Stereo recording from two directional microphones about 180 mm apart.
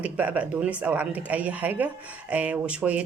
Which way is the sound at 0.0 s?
10° right (ahead or behind).